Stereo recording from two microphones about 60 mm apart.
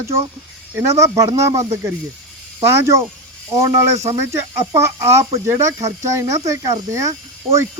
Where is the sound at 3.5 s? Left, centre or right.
Right.